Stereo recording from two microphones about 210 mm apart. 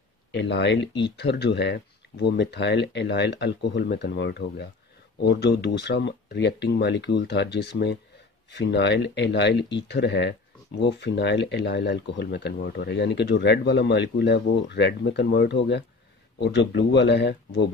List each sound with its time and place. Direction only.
0.3 s speech: 55° left (ahead or behind)